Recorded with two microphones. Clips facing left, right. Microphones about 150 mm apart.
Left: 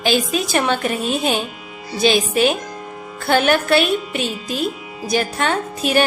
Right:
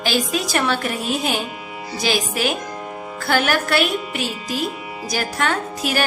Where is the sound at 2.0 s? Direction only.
25° left (ahead or behind).